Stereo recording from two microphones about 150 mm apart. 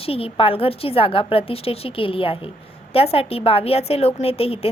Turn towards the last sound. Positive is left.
turn(degrees=40)  # may be behind; listen again after turning